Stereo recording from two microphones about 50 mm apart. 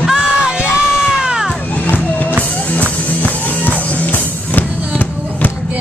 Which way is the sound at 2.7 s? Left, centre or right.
Left.